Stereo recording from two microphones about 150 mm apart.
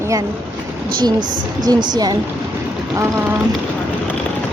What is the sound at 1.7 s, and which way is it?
Speech, 30° right (ahead or behind).